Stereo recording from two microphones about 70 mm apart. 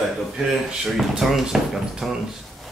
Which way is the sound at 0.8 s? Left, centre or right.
Centre.